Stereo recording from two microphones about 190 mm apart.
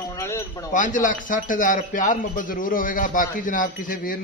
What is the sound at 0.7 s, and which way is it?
Speech, 40° left (ahead or behind).